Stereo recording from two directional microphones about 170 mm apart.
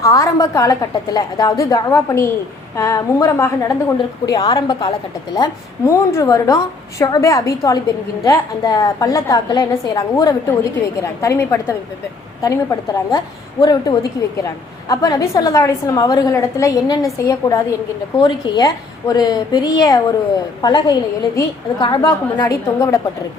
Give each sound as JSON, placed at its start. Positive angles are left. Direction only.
{"t": 0.0, "sound": "a woman's voice", "side_deg": 20}